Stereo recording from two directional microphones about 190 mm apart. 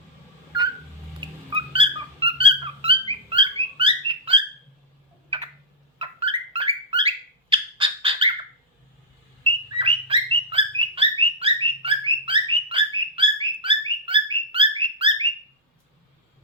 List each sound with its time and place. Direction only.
1.2 s cat: 30° right (ahead or behind)
5.3 s tick: 30° right (ahead or behind)
6.0 s bird: 30° right (ahead or behind)
9.4 s bird: 25° right (ahead or behind)